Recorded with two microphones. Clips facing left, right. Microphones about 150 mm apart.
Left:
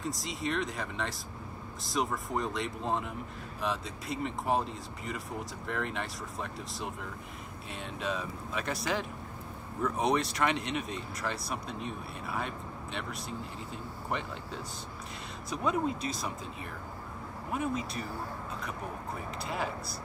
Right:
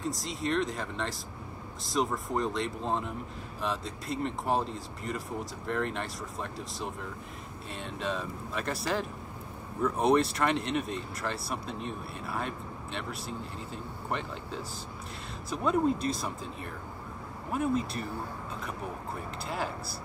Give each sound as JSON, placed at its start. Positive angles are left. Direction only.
{"t": 0.0, "sound": "speech", "side_deg": 0}
{"t": 8.0, "sound": "speech", "side_deg": 0}
{"t": 15.5, "sound": "speech", "side_deg": 0}
{"t": 17.5, "sound": "speech", "side_deg": 0}
{"t": 19.4, "sound": "speech", "side_deg": 0}